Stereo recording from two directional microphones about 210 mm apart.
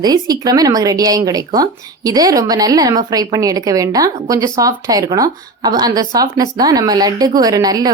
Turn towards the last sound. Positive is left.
turn(degrees=-20)  # may be behind; listen again after turning